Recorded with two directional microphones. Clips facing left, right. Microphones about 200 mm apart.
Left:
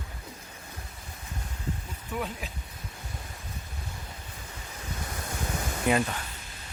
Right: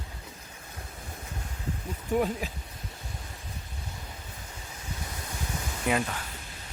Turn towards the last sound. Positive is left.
turn(degrees=0)  # may be behind; listen again after turning